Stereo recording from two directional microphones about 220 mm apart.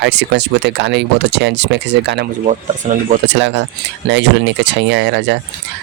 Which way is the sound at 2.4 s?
35° right (ahead or behind).